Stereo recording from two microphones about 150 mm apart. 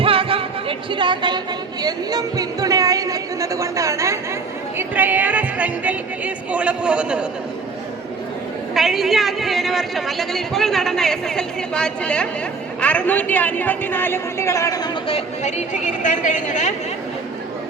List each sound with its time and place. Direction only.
0.0 s music: 40° right (ahead or behind)
1.8 s speech: 25° right (ahead or behind); by 7.3 s 5° right (ahead or behind)
8.7 s a man's voice: centre (ahead or behind); by 14.8 s 20° left (ahead or behind)
15.0 s speech: 45° left (ahead or behind)